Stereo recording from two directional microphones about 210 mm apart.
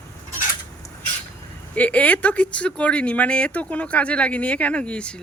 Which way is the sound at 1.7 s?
5° left (ahead or behind).